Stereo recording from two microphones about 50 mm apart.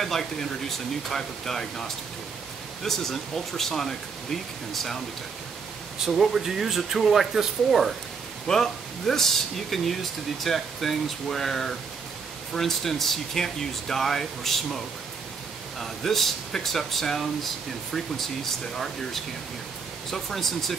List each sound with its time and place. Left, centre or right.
0.0 s speech: centre
5.9 s speech: centre
8.5 s speech: centre
15.8 s speech: centre